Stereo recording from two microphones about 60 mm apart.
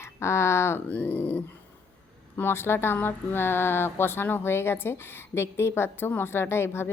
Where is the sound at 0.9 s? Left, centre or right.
Left.